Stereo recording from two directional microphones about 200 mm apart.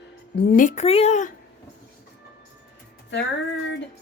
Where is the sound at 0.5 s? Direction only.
40° left (ahead or behind).